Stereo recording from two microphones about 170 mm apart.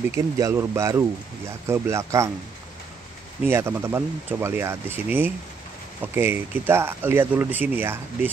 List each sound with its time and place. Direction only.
0.1 s speech: 15° right (ahead or behind)
3.4 s speech: 15° right (ahead or behind)